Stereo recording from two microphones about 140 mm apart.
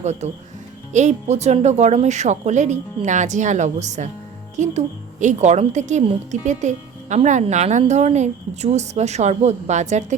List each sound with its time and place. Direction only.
0.0 s a woman's voice: 55° right (ahead or behind)